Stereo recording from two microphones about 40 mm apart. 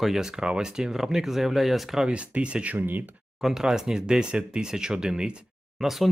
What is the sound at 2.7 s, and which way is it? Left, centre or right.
Speech, right.